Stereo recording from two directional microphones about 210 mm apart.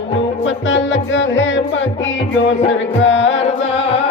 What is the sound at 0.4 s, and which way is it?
Music, 60° left (ahead or behind).